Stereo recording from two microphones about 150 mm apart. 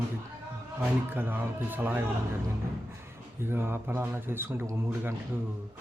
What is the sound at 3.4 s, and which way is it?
Speech, 15° right (ahead or behind).